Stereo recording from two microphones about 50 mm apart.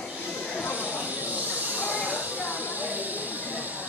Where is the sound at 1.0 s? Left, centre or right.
Right.